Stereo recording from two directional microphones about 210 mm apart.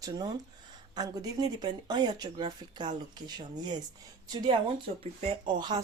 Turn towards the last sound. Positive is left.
turn(degrees=-20)  # may be behind; listen again after turning